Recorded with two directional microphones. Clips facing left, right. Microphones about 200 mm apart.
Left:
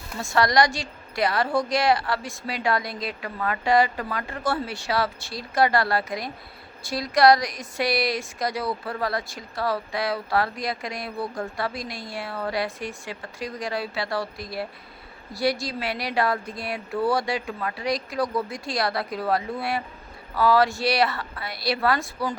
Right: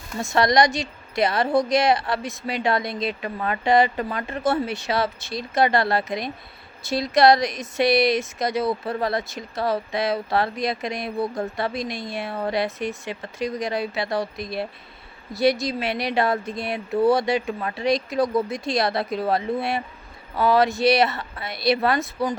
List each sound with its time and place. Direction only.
0.2 s speech: 20° right (ahead or behind)